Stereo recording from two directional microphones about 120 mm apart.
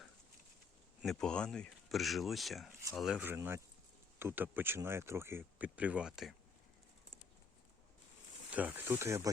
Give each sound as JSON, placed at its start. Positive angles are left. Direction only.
{"t": 1.0, "sound": "speech", "side_deg": 5}
{"t": 3.2, "sound": "speech", "side_deg": -15}
{"t": 8.5, "sound": "speech", "side_deg": -15}